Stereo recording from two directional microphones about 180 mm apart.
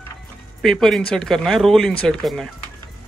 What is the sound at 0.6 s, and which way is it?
Speech, centre (ahead or behind).